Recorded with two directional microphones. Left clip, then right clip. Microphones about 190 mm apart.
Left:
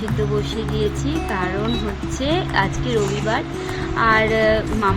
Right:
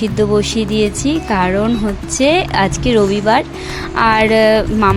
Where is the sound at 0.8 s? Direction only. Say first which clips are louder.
Right 6 dB; 50° right (ahead or behind).